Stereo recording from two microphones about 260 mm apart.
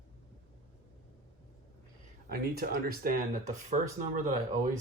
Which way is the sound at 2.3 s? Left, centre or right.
Right.